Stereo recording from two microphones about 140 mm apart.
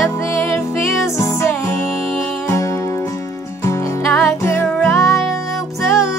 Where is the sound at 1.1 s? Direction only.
20° left (ahead or behind).